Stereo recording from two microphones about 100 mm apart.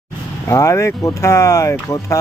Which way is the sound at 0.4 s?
30° left (ahead or behind).